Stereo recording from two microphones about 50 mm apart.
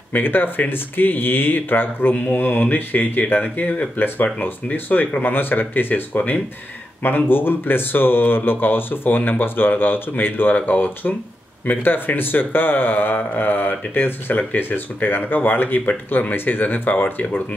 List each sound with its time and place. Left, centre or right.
0.1 s speech: left